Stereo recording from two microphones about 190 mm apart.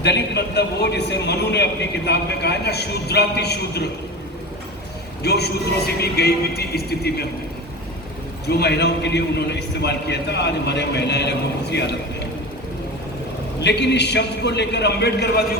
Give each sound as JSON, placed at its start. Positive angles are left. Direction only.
{"t": 0.0, "sound": "a man's voice", "side_deg": 60}
{"t": 5.2, "sound": "a man's voice", "side_deg": 60}
{"t": 8.4, "sound": "a man's voice", "side_deg": 60}
{"t": 13.6, "sound": "a man's voice", "side_deg": 65}